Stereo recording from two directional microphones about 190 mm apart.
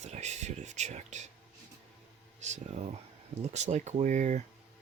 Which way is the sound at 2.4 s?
35° right (ahead or behind).